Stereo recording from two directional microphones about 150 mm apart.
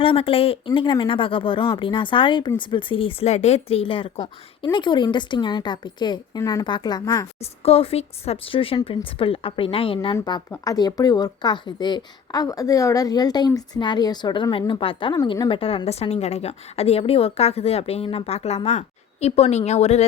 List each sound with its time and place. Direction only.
0.0 s speech: 35° left (ahead or behind)
7.6 s a woman's voice: 40° left (ahead or behind)
15.1 s a woman's voice: 25° left (ahead or behind); by 20.1 s 45° left (ahead or behind)